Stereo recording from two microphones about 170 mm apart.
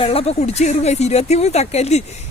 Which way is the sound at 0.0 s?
35° left (ahead or behind).